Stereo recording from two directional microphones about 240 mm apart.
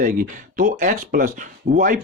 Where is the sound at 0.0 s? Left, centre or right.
Right.